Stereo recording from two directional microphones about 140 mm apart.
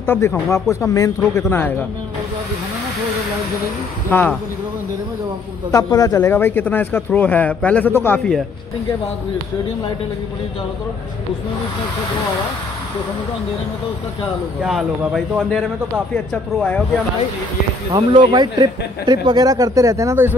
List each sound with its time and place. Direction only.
0.0 s speech: 15° left (ahead or behind)
4.1 s speech: 10° left (ahead or behind)
5.7 s speech: 25° left (ahead or behind)
14.6 s speech: centre (ahead or behind)
17.9 s speech: 30° right (ahead or behind)